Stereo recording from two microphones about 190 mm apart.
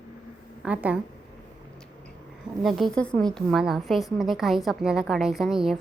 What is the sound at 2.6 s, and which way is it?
A woman's voice, centre (ahead or behind).